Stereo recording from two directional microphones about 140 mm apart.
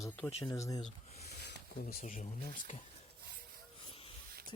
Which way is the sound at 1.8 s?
60° left (ahead or behind).